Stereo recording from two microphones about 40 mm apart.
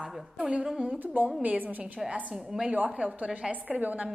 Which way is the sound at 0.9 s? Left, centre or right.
Right.